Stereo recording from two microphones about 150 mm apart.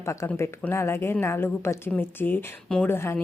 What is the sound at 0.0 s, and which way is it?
Speech, 20° left (ahead or behind).